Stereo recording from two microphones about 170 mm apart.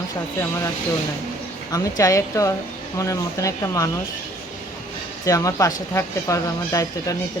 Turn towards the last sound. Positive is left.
turn(degrees=20)  # may be behind; listen again after turning